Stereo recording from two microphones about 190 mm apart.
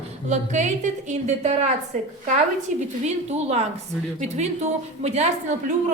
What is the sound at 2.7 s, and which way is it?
A woman's voice, 40° right (ahead or behind).